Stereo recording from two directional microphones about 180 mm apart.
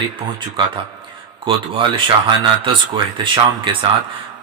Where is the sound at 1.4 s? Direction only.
30° right (ahead or behind).